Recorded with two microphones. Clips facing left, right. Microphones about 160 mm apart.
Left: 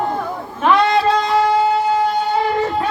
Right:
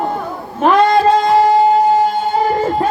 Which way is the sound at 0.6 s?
45° right (ahead or behind).